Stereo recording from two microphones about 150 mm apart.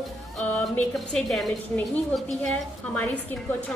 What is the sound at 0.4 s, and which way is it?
A woman's voice, 5° left (ahead or behind).